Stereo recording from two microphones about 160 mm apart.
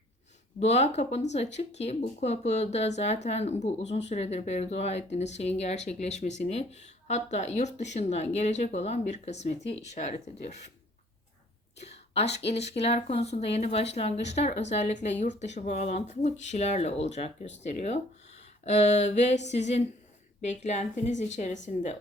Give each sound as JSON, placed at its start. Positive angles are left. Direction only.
{"t": 0.6, "sound": "speech", "side_deg": 45}
{"t": 11.8, "sound": "a sound", "side_deg": 40}
{"t": 12.5, "sound": "speech", "side_deg": 40}